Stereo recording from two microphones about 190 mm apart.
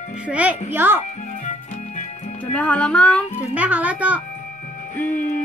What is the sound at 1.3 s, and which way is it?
Music, 40° left (ahead or behind).